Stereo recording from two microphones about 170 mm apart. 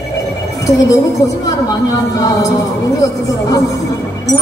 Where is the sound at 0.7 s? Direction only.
20° left (ahead or behind).